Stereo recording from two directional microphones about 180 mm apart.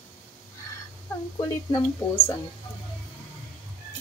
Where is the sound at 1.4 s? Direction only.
25° left (ahead or behind).